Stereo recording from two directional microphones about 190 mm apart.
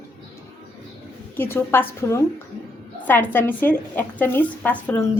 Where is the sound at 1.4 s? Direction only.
10° left (ahead or behind).